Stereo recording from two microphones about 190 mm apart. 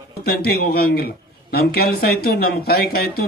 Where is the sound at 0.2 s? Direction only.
55° left (ahead or behind).